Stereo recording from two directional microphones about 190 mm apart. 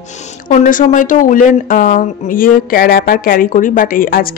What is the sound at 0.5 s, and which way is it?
Speech, 45° left (ahead or behind).